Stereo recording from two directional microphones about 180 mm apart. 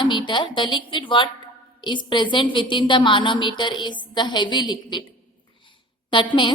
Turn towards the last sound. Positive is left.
turn(degrees=25)  # may be behind; listen again after turning